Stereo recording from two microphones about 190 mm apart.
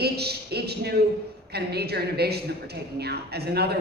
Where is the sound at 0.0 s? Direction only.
60° right (ahead or behind).